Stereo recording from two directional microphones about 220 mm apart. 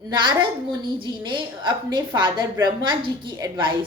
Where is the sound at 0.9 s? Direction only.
20° right (ahead or behind).